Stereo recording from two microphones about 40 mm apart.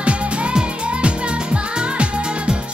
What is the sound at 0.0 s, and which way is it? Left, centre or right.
Music, right.